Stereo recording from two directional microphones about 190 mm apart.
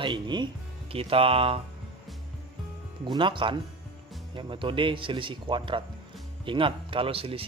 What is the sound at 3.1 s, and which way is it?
Speech, 25° right (ahead or behind).